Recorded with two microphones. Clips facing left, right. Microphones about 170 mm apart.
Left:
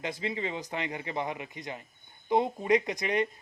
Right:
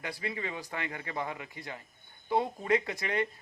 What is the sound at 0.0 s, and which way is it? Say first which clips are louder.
Speech: left 4 dB; 20° left (ahead or behind).